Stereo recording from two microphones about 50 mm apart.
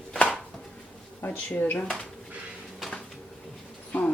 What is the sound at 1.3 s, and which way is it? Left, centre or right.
Speech, left.